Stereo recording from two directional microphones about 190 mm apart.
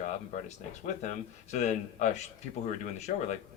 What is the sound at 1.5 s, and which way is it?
Speech, 40° left (ahead or behind).